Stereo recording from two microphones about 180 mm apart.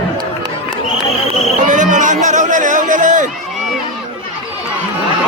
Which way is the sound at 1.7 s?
45° right (ahead or behind).